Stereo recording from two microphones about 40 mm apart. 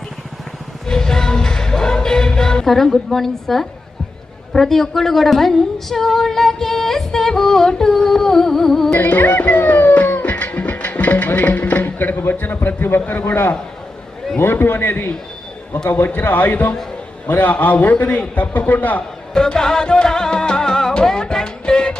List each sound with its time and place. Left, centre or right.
0.9 s music: centre
2.6 s a woman's voice: centre
8.9 s music: left
12.3 s a man's voice: left
13.2 s a man's voice: left
14.3 s a man's voice: left
16.0 s a man's voice: left
19.3 s music: centre